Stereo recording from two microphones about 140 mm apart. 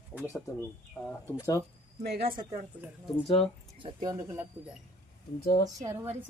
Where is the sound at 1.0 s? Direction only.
5° left (ahead or behind).